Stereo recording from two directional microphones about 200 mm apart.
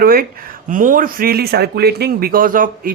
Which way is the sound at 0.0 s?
45° right (ahead or behind).